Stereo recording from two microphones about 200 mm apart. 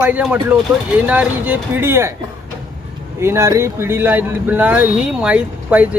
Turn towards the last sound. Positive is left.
turn(degrees=-5)  # may be behind; listen again after turning